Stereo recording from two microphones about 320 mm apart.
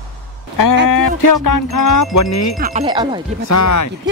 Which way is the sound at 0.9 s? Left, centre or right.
Left.